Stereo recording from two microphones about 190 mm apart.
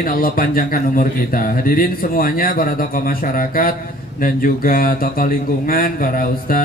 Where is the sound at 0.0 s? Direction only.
50° left (ahead or behind).